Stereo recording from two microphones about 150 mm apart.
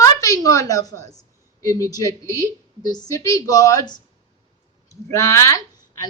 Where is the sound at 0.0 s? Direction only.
20° left (ahead or behind).